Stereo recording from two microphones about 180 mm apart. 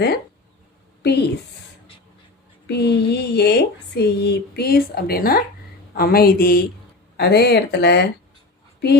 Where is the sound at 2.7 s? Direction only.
65° left (ahead or behind).